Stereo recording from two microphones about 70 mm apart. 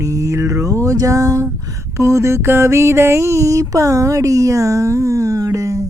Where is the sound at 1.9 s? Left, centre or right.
Right.